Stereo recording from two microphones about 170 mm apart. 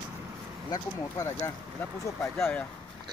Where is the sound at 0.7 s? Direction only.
20° left (ahead or behind).